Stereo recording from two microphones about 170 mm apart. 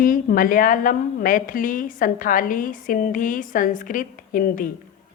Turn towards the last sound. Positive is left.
turn(degrees=55)  # may be behind; listen again after turning